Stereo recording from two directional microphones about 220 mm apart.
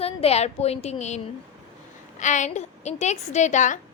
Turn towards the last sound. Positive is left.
turn(degrees=35)  # may be behind; listen again after turning